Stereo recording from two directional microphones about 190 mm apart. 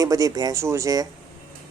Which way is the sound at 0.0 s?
15° right (ahead or behind).